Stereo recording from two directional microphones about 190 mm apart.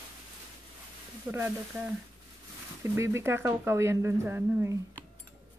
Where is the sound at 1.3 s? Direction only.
10° right (ahead or behind).